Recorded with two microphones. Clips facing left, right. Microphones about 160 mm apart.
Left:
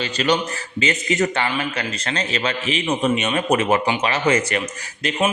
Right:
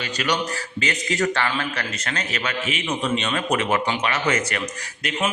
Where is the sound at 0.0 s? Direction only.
25° left (ahead or behind).